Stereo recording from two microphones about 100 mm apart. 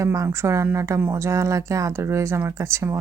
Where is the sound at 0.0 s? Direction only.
30° right (ahead or behind).